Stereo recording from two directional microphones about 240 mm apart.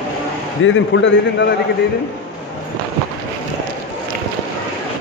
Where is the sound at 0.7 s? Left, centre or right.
Left.